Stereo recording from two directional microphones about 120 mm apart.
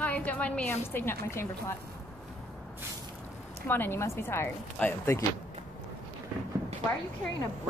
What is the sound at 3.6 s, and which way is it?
Speech, 15° left (ahead or behind).